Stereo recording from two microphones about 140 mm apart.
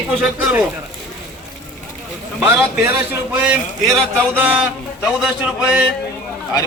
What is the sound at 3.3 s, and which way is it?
Speech, 10° right (ahead or behind).